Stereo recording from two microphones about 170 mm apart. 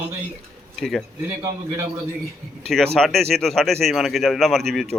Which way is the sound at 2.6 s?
Centre (ahead or behind).